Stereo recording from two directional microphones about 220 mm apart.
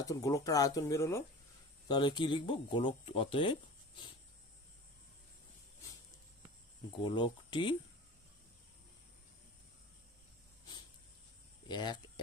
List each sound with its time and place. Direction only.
0.0 s speech: 15° left (ahead or behind)
7.0 s speech: 20° left (ahead or behind)
11.7 s speech: 20° left (ahead or behind)